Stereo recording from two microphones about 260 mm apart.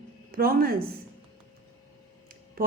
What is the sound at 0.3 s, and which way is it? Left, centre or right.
Speech, right.